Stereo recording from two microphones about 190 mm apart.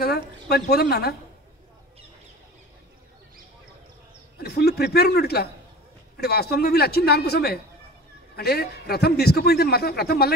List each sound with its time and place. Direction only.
0.0 s a man's voice: 55° left (ahead or behind)
4.4 s a man's voice: 55° left (ahead or behind)